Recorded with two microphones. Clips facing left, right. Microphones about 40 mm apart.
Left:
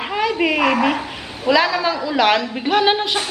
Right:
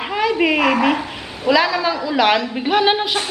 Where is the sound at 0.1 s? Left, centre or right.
Centre.